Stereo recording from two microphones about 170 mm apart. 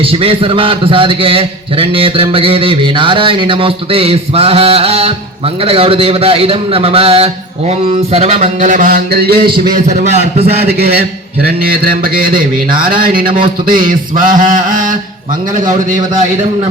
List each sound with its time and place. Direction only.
0.0 s a man's voice: 35° right (ahead or behind)
8.1 s a sound: 40° right (ahead or behind); by 9.5 s 65° right (ahead or behind)
9.6 s a man's voice: 45° right (ahead or behind)
10.6 s a man's voice: 65° right (ahead or behind)
13.4 s music: 30° right (ahead or behind)
14.3 s a sound: 50° right (ahead or behind)